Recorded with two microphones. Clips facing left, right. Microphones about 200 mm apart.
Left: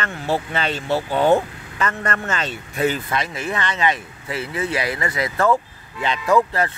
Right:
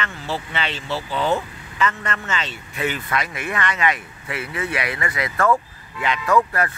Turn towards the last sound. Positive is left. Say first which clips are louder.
# left 1 dB
turn(degrees=25)  # may be behind; listen again after turning